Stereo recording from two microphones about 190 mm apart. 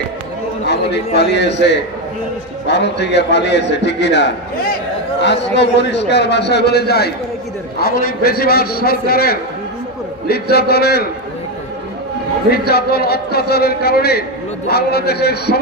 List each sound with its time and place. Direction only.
0.7 s a man's voice: 60° left (ahead or behind)
5.5 s a man's voice: 65° left (ahead or behind)
12.4 s a man's voice: 55° left (ahead or behind)